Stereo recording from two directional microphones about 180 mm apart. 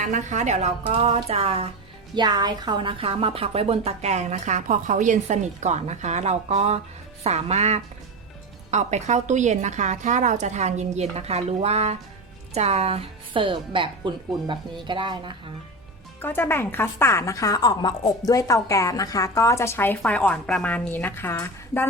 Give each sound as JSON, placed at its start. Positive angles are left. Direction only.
{"t": 0.0, "sound": "speech", "side_deg": -40}
{"t": 2.1, "sound": "a woman's voice", "side_deg": -25}
{"t": 16.2, "sound": "a woman's voice", "side_deg": 10}